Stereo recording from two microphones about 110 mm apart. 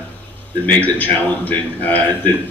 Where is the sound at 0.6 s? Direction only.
15° left (ahead or behind).